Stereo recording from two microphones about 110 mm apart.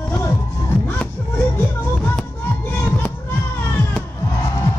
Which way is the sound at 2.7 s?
20° left (ahead or behind).